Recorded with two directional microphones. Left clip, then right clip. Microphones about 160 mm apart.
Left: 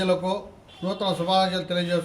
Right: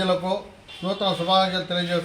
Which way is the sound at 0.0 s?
35° left (ahead or behind).